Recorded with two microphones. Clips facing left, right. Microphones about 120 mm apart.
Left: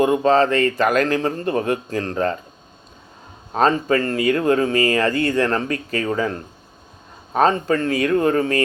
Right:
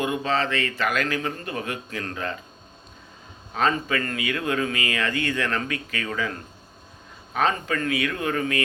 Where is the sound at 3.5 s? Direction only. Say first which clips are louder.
Left 7 dB; 40° left (ahead or behind).